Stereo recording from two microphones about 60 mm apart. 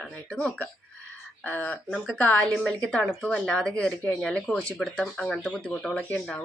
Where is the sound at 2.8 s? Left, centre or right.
Centre.